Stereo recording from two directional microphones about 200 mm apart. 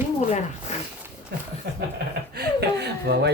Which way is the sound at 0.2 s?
35° left (ahead or behind).